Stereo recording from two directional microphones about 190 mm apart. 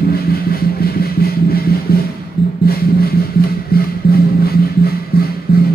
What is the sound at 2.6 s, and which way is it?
Music, 55° left (ahead or behind).